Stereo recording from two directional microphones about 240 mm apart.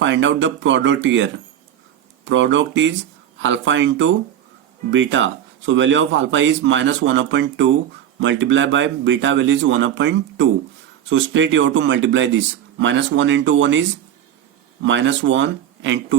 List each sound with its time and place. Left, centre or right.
0.0 s speech: right
14.8 s speech: right